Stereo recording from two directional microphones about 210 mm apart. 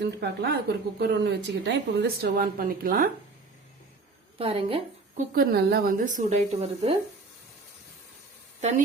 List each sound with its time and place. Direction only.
0.0 s speech: 50° right (ahead or behind)
4.4 s a woman's voice: 25° right (ahead or behind)
5.3 s a woman's voice: 45° right (ahead or behind)